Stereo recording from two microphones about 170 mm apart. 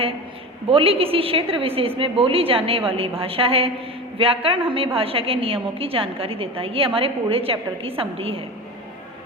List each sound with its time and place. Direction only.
0.7 s a woman's voice: 35° right (ahead or behind)